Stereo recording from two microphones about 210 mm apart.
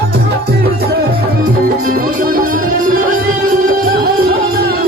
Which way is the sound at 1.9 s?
45° right (ahead or behind).